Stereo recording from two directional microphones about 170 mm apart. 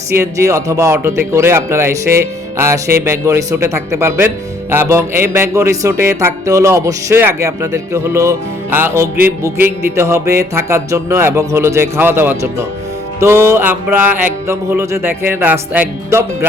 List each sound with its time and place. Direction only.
0.1 s speech: 15° right (ahead or behind)